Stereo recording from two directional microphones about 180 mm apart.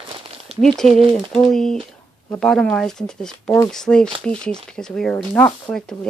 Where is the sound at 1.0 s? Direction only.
30° right (ahead or behind).